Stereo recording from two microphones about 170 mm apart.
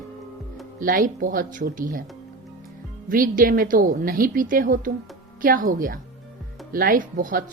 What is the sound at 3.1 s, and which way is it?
A woman's voice, 55° right (ahead or behind).